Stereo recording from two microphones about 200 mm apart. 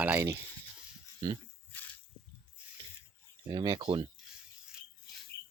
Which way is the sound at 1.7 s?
10° left (ahead or behind).